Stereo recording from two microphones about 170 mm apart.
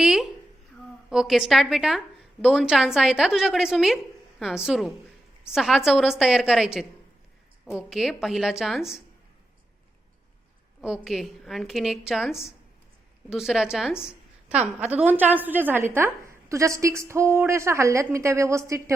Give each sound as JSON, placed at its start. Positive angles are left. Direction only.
{"t": 0.0, "sound": "a sound", "side_deg": -5}
{"t": 1.1, "sound": "a woman's voice", "side_deg": 0}
{"t": 10.8, "sound": "a woman's voice", "side_deg": -5}